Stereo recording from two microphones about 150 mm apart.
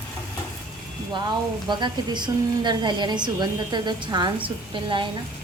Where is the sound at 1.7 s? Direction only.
30° right (ahead or behind).